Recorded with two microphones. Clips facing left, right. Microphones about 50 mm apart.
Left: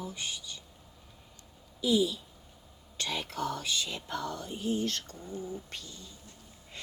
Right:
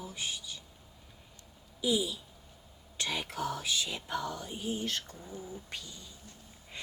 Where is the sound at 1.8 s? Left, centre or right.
Centre.